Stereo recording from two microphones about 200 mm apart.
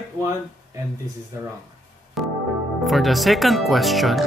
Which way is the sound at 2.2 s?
Centre (ahead or behind).